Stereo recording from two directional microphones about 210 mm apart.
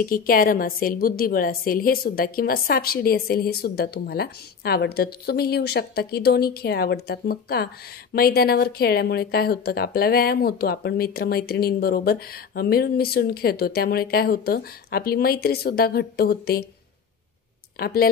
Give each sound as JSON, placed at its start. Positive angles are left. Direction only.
{"t": 0.0, "sound": "a woman's voice", "side_deg": 40}
{"t": 17.7, "sound": "a woman's voice", "side_deg": 45}